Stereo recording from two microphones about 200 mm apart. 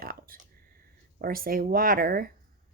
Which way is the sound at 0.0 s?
50° right (ahead or behind).